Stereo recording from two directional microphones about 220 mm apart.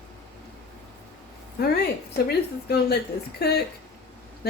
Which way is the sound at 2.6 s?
45° left (ahead or behind).